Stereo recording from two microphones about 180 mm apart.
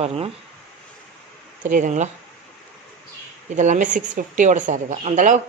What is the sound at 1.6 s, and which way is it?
Speech, 45° right (ahead or behind).